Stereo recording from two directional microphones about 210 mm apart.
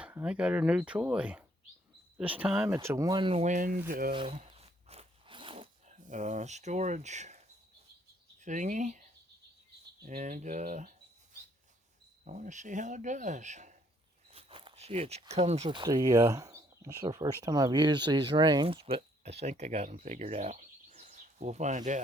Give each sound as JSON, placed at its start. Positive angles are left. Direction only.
{"t": 0.0, "sound": "speech", "side_deg": -5}
{"t": 4.1, "sound": "biting", "side_deg": -25}
{"t": 8.4, "sound": "speech", "side_deg": -35}
{"t": 10.2, "sound": "speech", "side_deg": -35}
{"t": 12.2, "sound": "speech", "side_deg": -35}